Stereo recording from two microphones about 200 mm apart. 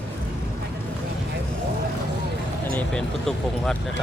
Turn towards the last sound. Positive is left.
turn(degrees=5)  # may be behind; listen again after turning